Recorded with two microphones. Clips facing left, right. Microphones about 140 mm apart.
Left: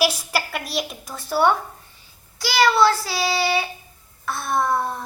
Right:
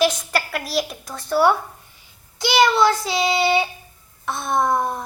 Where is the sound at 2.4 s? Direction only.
20° right (ahead or behind).